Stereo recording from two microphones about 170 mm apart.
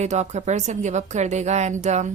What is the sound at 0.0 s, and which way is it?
Speech, 40° right (ahead or behind).